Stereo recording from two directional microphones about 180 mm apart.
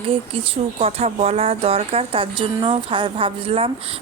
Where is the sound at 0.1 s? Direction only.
30° right (ahead or behind).